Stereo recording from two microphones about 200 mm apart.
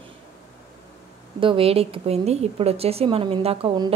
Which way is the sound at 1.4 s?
25° right (ahead or behind).